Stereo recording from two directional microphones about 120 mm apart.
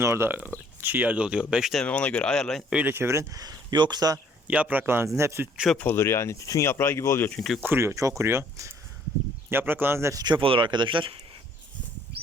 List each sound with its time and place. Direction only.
0.0 s speech: 20° right (ahead or behind); by 1.8 s 5° right (ahead or behind)
1.8 s speech: 10° left (ahead or behind)
2.7 s speech: 20° right (ahead or behind); by 4.2 s 35° right (ahead or behind)
4.4 s speech: 10° right (ahead or behind)
5.7 s speech: 15° left (ahead or behind)
7.3 s speech: 5° left (ahead or behind)
7.6 s speech: 20° right (ahead or behind)
10.2 s speech: 45° right (ahead or behind)